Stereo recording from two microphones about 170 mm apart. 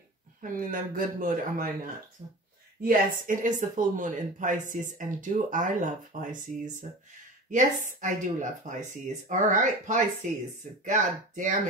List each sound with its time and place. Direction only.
0.4 s speech: 55° right (ahead or behind)
2.8 s speech: 55° right (ahead or behind)